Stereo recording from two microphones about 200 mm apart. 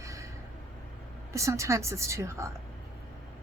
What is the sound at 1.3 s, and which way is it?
Speech, 15° right (ahead or behind).